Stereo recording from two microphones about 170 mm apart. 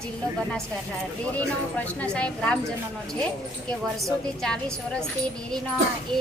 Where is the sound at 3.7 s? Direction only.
Centre (ahead or behind).